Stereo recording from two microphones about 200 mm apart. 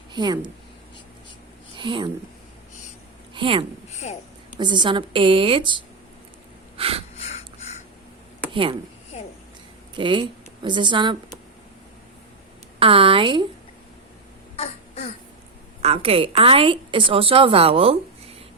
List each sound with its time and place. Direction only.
0.1 s speech: 20° right (ahead or behind)
1.7 s speech: 25° right (ahead or behind)
3.3 s a woman's voice: 25° right (ahead or behind)
6.7 s a sound: 30° right (ahead or behind)
7.2 s a sound: 30° left (ahead or behind)
9.9 s speech: 25° right (ahead or behind)
12.8 s a woman's voice: 25° right (ahead or behind)
14.5 s a sound: 30° left (ahead or behind)
15.8 s a woman's voice: 30° right (ahead or behind)